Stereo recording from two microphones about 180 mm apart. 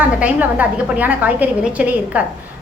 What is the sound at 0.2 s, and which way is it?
A woman's voice, 10° right (ahead or behind).